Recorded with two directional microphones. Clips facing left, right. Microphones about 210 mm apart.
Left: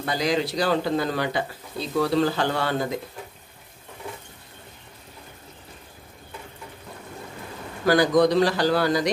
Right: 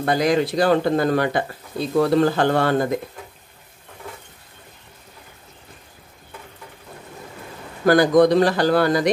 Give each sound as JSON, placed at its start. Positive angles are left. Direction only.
{"t": 0.0, "sound": "speech", "side_deg": -55}
{"t": 7.8, "sound": "speech", "side_deg": -50}